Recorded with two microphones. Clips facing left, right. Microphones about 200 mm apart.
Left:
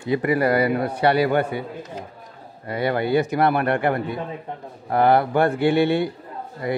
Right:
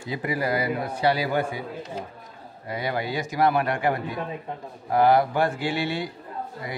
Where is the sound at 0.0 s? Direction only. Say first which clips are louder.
Left 7 dB; 60° left (ahead or behind).